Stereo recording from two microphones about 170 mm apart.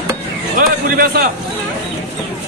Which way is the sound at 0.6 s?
60° right (ahead or behind).